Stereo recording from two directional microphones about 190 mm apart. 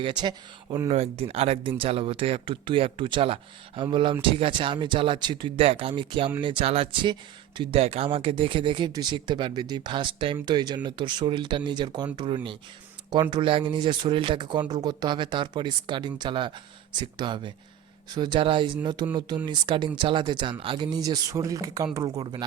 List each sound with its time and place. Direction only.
0.0 s speech: 25° right (ahead or behind)